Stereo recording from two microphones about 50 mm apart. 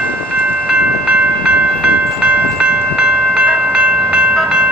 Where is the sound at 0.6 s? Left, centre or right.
Right.